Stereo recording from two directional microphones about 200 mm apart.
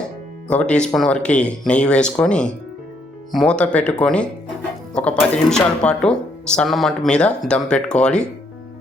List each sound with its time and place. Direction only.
0.4 s speech: 5° left (ahead or behind)